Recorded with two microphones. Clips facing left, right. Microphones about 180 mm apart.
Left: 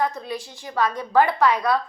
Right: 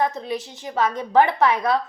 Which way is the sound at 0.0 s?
20° right (ahead or behind).